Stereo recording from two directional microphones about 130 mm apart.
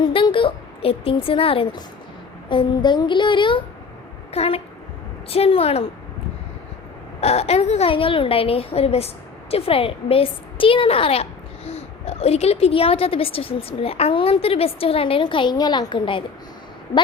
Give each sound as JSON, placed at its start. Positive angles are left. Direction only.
{"t": 0.0, "sound": "a woman's voice", "side_deg": 40}
{"t": 7.2, "sound": "a woman's voice", "side_deg": 55}